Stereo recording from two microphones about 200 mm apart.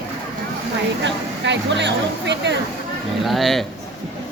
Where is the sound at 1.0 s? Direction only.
65° right (ahead or behind).